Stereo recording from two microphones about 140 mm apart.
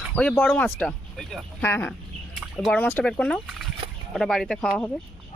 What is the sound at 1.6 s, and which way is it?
Speech, 15° left (ahead or behind).